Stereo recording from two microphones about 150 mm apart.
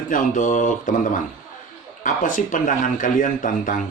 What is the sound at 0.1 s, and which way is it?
Speech, 60° left (ahead or behind).